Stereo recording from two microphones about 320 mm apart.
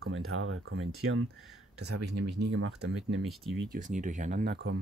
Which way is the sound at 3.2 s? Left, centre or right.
Centre.